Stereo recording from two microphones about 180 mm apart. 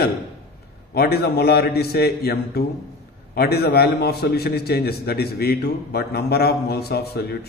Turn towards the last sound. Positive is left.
turn(degrees=60)  # may be behind; listen again after turning